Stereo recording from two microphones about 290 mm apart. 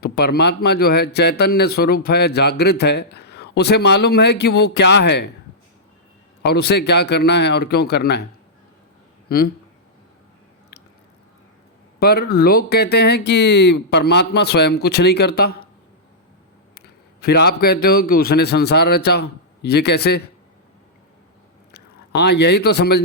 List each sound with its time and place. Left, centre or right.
0.0 s speech: left
6.4 s speech: left
11.9 s speech: left
16.7 s a sound: left
17.8 s speech: left
21.7 s speech: left